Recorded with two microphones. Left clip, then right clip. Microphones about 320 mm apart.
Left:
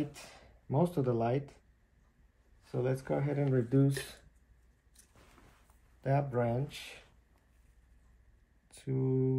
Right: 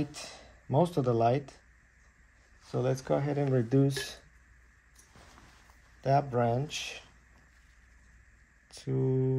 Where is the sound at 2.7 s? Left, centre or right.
Right.